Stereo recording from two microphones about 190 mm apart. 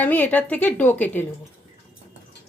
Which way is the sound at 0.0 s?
10° left (ahead or behind).